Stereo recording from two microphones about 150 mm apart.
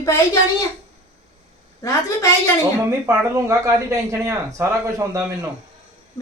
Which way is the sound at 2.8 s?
20° right (ahead or behind).